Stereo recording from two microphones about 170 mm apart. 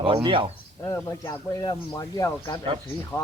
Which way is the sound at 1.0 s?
20° left (ahead or behind).